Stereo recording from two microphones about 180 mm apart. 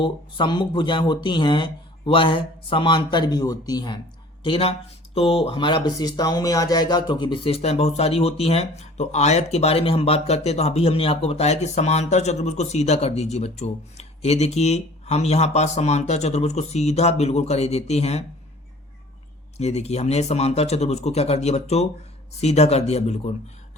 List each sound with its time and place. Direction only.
0.0 s speech: 25° left (ahead or behind)
19.5 s speech: 35° left (ahead or behind)